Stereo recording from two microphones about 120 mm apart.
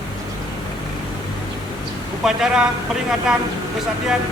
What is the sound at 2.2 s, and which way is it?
Speech, 5° right (ahead or behind).